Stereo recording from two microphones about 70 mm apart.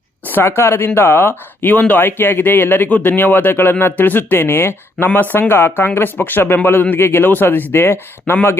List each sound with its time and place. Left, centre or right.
0.3 s speech: left